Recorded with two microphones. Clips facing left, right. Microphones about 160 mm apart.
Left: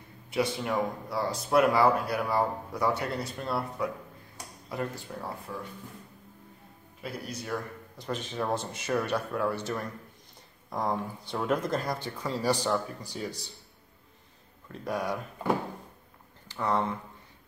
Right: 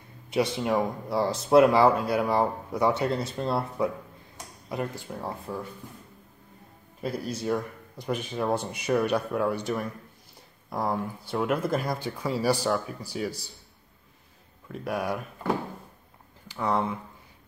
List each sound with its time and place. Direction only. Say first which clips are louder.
0.3 s speech: right 4 dB; 20° right (ahead or behind)
7.0 s speech: right 7 dB; 35° right (ahead or behind)
8.0 s speech: right 4 dB; 10° right (ahead or behind)
14.7 s speech: right 2 dB; 10° right (ahead or behind)
16.4 s speech: right 2 dB; 10° right (ahead or behind)